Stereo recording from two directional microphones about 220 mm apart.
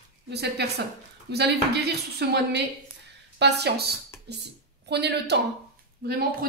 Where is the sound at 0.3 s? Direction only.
50° right (ahead or behind).